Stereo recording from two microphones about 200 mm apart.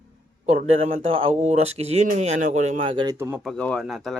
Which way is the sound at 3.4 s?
5° left (ahead or behind).